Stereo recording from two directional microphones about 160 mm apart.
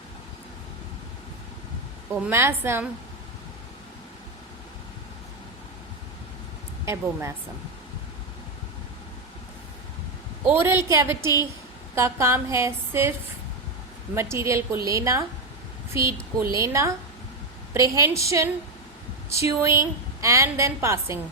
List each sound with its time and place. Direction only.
2.1 s speech: 10° right (ahead or behind)
6.8 s speech: 15° right (ahead or behind)
10.4 s speech: 15° right (ahead or behind)
14.2 s a woman's voice: 15° right (ahead or behind)